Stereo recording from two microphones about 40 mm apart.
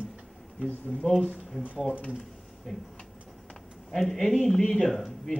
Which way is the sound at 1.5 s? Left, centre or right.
Left.